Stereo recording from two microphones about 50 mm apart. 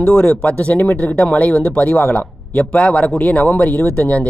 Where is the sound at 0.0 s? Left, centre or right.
Centre.